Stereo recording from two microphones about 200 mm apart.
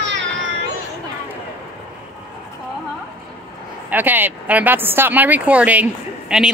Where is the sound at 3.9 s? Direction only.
10° right (ahead or behind).